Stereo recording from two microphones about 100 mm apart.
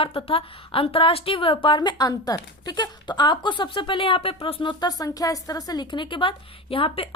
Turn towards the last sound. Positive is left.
turn(degrees=65)  # may be behind; listen again after turning